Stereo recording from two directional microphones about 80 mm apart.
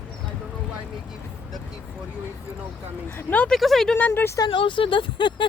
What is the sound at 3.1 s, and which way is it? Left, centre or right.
Speech, left.